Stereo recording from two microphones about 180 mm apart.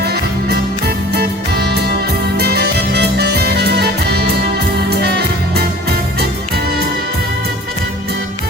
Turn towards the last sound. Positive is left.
turn(degrees=-60)  # may be behind; listen again after turning